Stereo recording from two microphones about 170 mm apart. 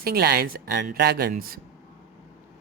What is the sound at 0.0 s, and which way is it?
Speech, 65° right (ahead or behind).